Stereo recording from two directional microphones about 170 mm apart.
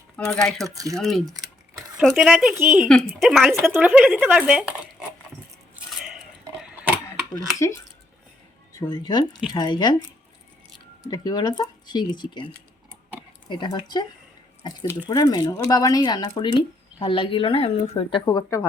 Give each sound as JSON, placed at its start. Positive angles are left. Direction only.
{"t": 0.3, "sound": "speech", "side_deg": 5}
{"t": 0.7, "sound": "speech", "side_deg": -20}
{"t": 0.9, "sound": "speech", "side_deg": 0}
{"t": 3.6, "sound": "speech", "side_deg": -10}
{"t": 5.7, "sound": "a sound", "side_deg": -5}
{"t": 8.7, "sound": "speech", "side_deg": 25}
{"t": 11.1, "sound": "speech", "side_deg": 25}
{"t": 13.5, "sound": "speech", "side_deg": 25}